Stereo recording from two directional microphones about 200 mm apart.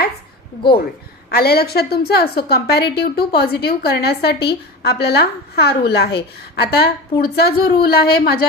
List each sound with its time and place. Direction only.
1.3 s a woman's voice: 50° left (ahead or behind)